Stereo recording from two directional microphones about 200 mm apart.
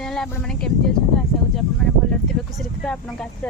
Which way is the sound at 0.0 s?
5° left (ahead or behind).